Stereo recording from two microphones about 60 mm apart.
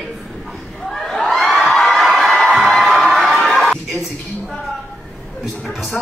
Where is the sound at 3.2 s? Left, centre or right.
Centre.